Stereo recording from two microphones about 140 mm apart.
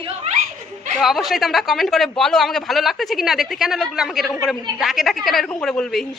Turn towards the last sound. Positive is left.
turn(degrees=5)  # may be behind; listen again after turning